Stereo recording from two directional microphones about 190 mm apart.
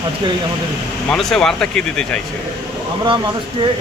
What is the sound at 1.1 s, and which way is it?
Speech, centre (ahead or behind).